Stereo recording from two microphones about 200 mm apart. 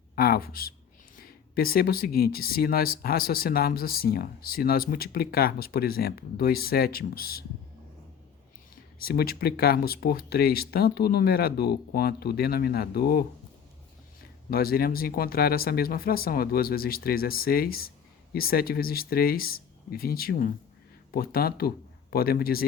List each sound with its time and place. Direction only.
0.2 s speech: 50° left (ahead or behind)
9.0 s speech: 50° left (ahead or behind)
14.5 s speech: 50° left (ahead or behind)